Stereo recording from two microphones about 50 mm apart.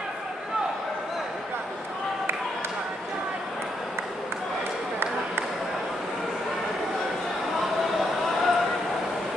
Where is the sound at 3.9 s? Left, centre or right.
Right.